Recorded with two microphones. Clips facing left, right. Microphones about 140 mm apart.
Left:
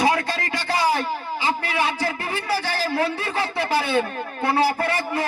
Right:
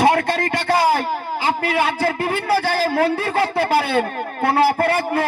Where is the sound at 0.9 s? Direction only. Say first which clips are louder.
Right 4 dB; 50° right (ahead or behind).